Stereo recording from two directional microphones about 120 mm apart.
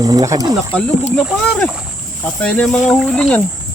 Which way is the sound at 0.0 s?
30° right (ahead or behind).